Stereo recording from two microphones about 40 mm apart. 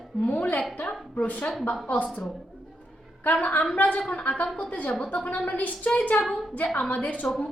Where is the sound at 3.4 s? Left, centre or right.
Left.